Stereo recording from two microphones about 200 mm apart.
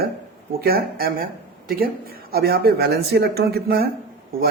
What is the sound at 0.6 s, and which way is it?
A man's voice, 50° right (ahead or behind).